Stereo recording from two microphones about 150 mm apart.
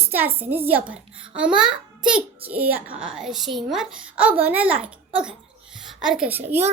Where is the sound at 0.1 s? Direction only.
15° right (ahead or behind).